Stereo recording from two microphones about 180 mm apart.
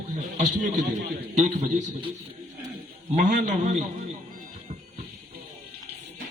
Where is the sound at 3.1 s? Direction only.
40° right (ahead or behind).